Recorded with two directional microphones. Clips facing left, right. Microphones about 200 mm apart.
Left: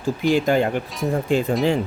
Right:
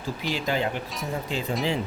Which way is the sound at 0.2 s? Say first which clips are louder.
Left 9 dB; 50° left (ahead or behind).